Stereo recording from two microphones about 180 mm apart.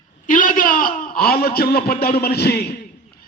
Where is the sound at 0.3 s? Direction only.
50° left (ahead or behind).